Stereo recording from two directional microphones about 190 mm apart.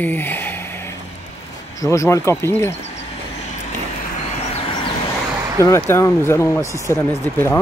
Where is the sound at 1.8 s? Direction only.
15° left (ahead or behind).